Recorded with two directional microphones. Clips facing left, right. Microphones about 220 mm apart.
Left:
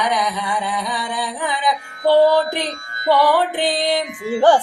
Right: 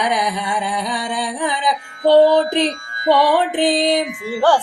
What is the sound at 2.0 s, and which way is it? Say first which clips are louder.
Music: right 2 dB; 20° right (ahead or behind).